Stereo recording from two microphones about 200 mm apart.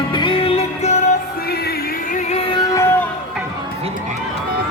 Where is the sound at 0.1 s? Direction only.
25° left (ahead or behind).